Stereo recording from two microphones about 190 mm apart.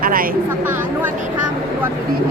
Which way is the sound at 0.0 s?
50° right (ahead or behind).